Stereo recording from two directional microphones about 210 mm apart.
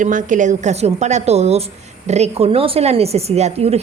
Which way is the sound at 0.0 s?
40° right (ahead or behind).